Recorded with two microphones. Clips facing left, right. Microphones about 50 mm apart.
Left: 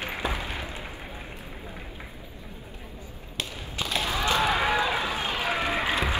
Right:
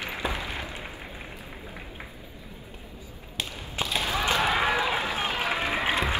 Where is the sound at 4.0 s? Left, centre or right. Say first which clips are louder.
Even; right.